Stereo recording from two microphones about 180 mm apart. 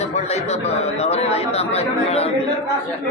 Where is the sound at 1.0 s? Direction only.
35° left (ahead or behind).